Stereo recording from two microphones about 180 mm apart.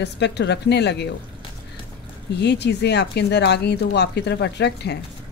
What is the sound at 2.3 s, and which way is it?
Speech, 70° left (ahead or behind).